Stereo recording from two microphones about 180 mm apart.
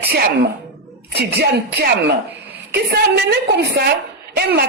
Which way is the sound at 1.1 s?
65° right (ahead or behind).